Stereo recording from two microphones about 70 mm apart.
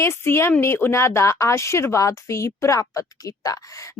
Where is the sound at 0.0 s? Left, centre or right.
Left.